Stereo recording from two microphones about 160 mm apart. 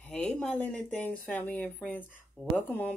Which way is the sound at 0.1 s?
5° left (ahead or behind).